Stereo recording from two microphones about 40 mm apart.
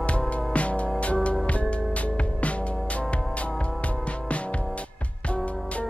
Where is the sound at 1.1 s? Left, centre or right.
Left.